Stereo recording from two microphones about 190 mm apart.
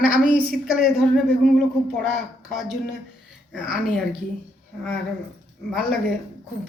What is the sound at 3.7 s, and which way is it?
Speech, centre (ahead or behind).